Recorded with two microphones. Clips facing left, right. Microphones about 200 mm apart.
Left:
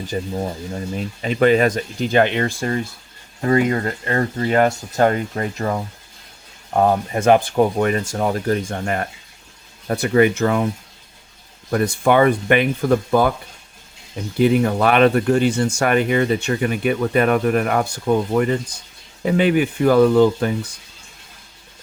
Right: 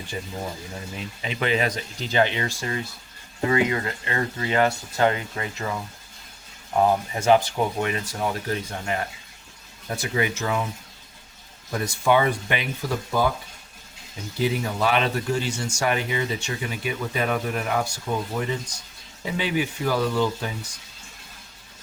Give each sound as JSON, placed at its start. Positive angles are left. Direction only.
{"t": 0.1, "sound": "speech", "side_deg": 40}
{"t": 11.7, "sound": "speech", "side_deg": 60}
{"t": 14.3, "sound": "speech", "side_deg": 60}